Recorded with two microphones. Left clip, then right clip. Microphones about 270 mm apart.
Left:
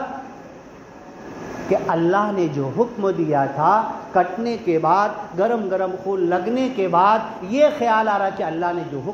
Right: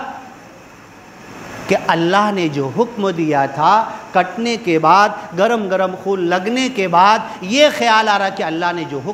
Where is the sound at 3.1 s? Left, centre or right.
Right.